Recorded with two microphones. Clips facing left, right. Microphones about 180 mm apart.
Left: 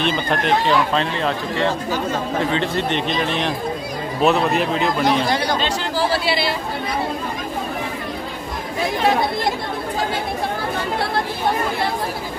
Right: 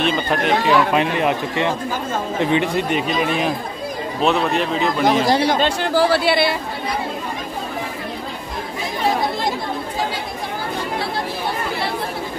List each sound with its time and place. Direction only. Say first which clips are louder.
0.0 s a man's voice: right 1 dB; centre (ahead or behind)
5.2 s speech: right 4 dB; 35° right (ahead or behind)
5.6 s speech: right 4 dB; 50° right (ahead or behind)